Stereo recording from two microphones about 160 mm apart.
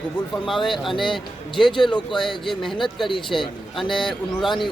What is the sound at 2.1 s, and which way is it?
A man's voice, centre (ahead or behind).